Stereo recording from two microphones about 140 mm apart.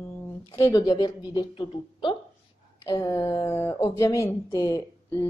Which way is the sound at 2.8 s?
25° left (ahead or behind).